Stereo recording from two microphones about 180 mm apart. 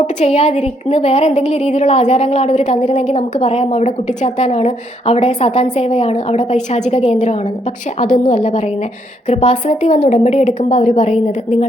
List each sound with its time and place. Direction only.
0.2 s a woman's voice: 40° left (ahead or behind)